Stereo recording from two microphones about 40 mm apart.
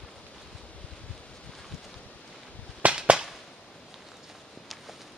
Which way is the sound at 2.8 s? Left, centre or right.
Right.